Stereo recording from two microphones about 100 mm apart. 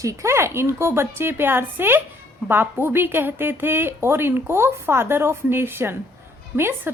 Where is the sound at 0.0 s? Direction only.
30° right (ahead or behind).